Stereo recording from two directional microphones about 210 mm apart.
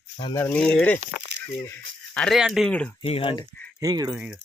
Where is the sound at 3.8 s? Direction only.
15° right (ahead or behind).